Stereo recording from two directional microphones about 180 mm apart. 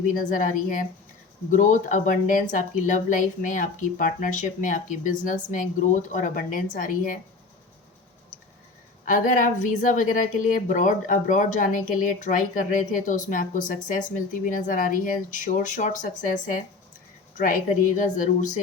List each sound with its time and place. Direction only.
0.1 s speech: 50° left (ahead or behind)
9.0 s speech: 45° left (ahead or behind)